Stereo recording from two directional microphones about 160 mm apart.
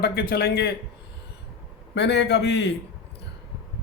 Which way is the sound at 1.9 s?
90° left.